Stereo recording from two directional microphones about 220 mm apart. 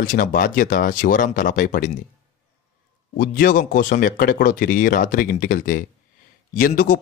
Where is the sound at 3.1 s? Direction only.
40° left (ahead or behind).